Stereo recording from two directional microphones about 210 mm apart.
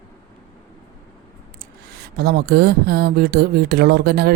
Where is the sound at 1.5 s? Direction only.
50° right (ahead or behind).